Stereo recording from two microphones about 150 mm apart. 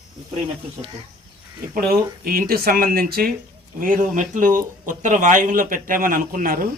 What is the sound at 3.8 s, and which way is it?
Speech, 60° right (ahead or behind).